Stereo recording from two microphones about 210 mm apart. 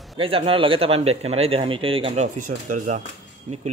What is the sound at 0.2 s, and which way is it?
Speech, 25° right (ahead or behind).